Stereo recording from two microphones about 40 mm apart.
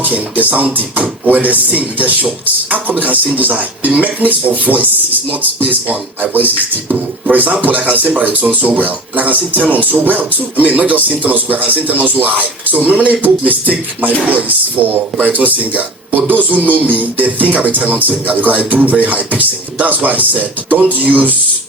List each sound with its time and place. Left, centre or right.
0.0 s speech: right